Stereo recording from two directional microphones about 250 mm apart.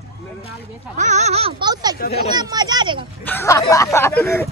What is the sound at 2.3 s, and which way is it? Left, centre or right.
Speech, centre.